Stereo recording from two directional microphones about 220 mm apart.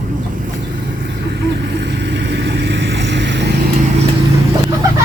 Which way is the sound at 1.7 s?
50° right (ahead or behind).